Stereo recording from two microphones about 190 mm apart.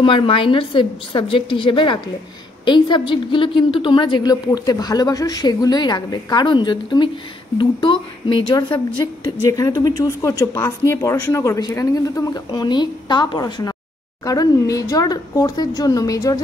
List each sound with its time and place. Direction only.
0.0 s a woman's voice: 25° left (ahead or behind)